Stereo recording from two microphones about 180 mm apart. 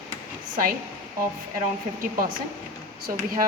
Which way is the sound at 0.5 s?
50° right (ahead or behind).